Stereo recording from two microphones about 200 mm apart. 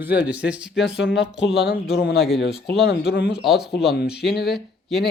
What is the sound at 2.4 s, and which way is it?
Speech, 55° left (ahead or behind).